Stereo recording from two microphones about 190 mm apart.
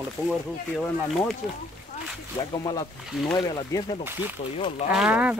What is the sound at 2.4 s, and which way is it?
Speech, 20° left (ahead or behind).